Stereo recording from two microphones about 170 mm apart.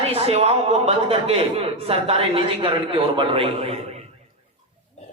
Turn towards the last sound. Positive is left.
turn(degrees=-35)  # may be behind; listen again after turning